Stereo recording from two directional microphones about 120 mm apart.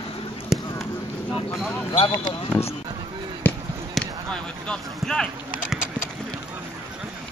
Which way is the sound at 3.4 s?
15° left (ahead or behind).